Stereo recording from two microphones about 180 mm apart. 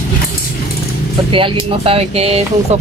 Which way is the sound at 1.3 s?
30° right (ahead or behind).